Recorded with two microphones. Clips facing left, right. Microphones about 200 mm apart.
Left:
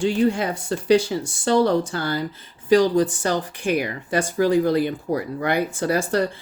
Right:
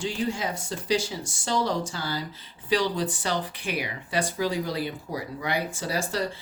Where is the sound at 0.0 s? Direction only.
60° left (ahead or behind).